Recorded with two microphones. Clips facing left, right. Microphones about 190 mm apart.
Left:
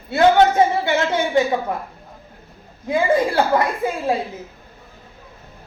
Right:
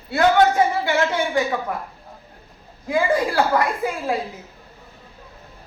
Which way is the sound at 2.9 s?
25° left (ahead or behind).